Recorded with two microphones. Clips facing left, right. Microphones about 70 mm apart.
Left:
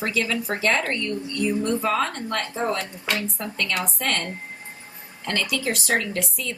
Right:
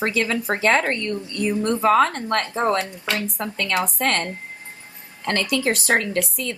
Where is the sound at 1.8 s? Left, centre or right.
Right.